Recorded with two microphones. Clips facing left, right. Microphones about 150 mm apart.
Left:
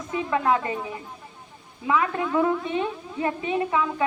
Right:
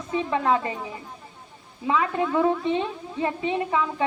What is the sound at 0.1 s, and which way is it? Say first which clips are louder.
Speech: even; 25° right (ahead or behind).